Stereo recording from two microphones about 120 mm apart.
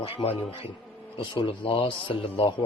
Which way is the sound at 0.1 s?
55° left (ahead or behind).